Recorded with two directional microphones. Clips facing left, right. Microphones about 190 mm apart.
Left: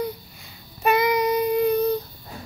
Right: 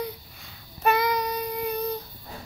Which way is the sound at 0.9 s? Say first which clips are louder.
Left 6 dB; 20° left (ahead or behind).